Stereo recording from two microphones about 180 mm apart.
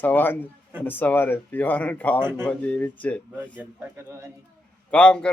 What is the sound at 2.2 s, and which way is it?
Speech, 15° right (ahead or behind).